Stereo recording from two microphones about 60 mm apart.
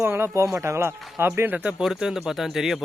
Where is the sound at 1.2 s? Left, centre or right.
Right.